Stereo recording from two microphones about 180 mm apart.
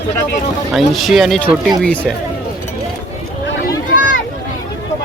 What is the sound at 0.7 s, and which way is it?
Speech, centre (ahead or behind).